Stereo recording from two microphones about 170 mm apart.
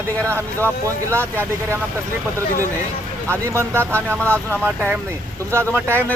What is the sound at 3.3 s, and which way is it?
Speech, 15° right (ahead or behind).